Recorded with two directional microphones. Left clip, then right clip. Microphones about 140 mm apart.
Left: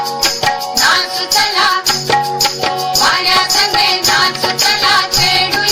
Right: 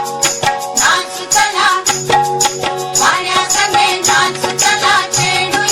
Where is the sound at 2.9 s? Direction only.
40° left (ahead or behind).